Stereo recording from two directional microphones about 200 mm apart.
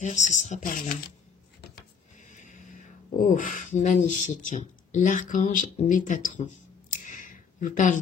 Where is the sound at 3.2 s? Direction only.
40° left (ahead or behind).